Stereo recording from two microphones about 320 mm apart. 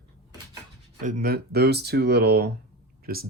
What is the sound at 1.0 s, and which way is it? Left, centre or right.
Speech, right.